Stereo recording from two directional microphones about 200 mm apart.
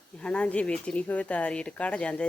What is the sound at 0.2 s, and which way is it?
Speech, 5° left (ahead or behind).